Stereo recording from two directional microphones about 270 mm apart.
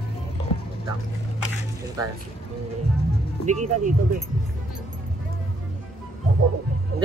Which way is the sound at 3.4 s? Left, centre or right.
Right.